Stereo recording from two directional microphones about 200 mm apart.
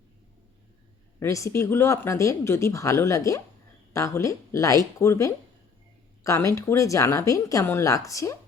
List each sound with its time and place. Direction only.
1.2 s speech: 15° left (ahead or behind)